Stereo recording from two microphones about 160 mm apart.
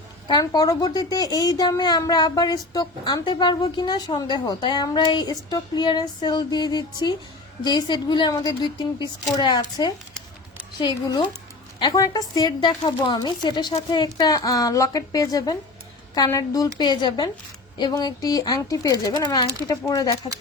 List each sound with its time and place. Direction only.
0.3 s a woman's voice: 25° left (ahead or behind)